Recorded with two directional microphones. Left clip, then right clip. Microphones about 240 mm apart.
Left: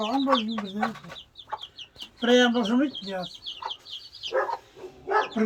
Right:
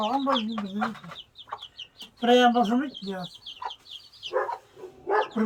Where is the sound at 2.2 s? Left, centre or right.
Right.